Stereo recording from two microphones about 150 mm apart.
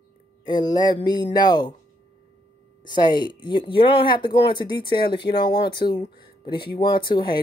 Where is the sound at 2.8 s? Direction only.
30° left (ahead or behind).